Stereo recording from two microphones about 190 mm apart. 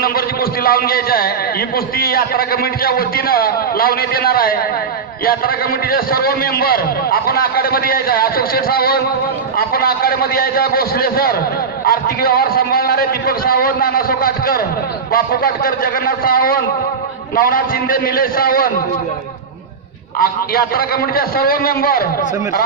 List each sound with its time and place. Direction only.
0.7 s a man's voice: 50° left (ahead or behind)
5.9 s a man's voice: 50° left (ahead or behind)
20.2 s a man's voice: 50° left (ahead or behind)